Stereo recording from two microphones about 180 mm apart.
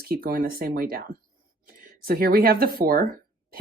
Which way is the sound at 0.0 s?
55° right (ahead or behind).